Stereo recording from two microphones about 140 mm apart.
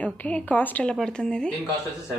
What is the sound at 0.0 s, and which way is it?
A woman's voice, 10° left (ahead or behind).